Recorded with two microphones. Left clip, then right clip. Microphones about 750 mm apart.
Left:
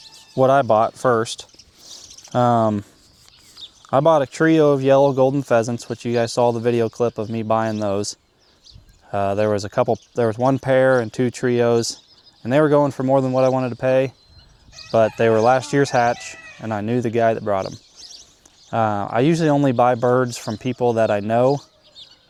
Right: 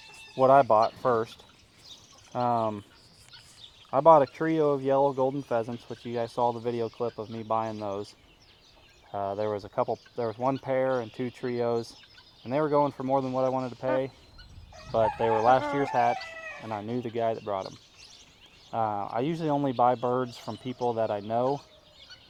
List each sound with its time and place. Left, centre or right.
0.3 s speech: left
3.8 s speech: left
18.7 s speech: left